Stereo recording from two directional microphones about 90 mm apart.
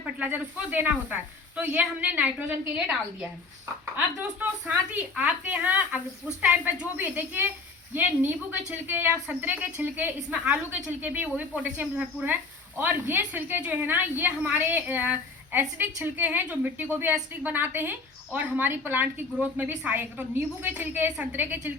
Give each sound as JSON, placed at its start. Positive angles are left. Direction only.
{"t": 0.0, "sound": "a woman's voice", "side_deg": -20}